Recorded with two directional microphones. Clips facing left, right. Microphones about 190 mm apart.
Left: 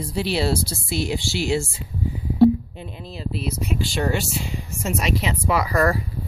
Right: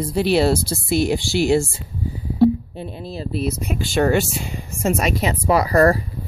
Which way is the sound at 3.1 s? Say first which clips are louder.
Right 4 dB; 45° right (ahead or behind).